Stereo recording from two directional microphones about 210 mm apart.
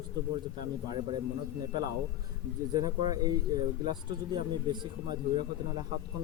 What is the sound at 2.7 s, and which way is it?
Speech, 20° right (ahead or behind).